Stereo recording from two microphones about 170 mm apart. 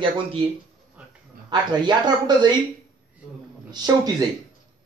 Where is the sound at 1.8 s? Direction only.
25° right (ahead or behind).